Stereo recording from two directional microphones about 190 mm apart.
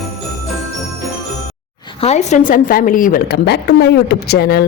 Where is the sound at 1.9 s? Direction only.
35° left (ahead or behind); by 4.6 s 55° left (ahead or behind).